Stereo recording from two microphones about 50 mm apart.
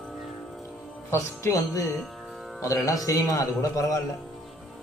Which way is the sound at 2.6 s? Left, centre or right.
Left.